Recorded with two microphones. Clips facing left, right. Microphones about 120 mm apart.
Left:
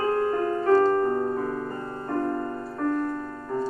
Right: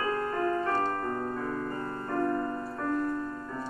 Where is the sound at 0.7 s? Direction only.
35° left (ahead or behind).